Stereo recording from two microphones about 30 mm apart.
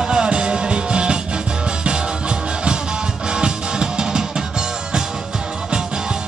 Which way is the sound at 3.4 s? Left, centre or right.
Right.